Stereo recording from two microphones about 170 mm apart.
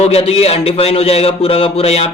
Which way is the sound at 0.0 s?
35° left (ahead or behind).